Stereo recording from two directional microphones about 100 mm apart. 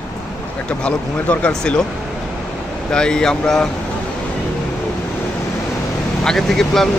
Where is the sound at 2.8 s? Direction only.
10° left (ahead or behind).